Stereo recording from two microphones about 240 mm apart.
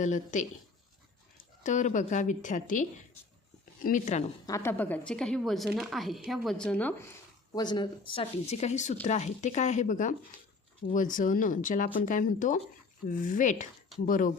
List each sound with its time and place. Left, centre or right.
0.0 s a woman's voice: left
1.6 s a woman's voice: left
3.8 s a woman's voice: left
4.4 s a woman's voice: centre
7.5 s a woman's voice: centre; by 14.3 s left